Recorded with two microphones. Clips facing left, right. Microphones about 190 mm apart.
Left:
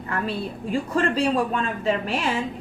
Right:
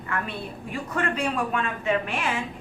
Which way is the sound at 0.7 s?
30° left (ahead or behind).